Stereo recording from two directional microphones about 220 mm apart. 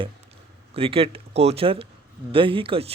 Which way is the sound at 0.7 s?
25° right (ahead or behind).